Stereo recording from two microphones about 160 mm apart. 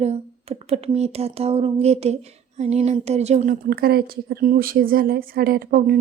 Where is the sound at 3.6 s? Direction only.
70° right (ahead or behind).